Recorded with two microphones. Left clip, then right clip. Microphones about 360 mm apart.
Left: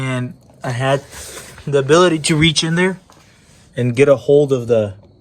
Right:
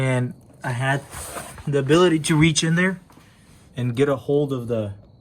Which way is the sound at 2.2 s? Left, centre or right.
Centre.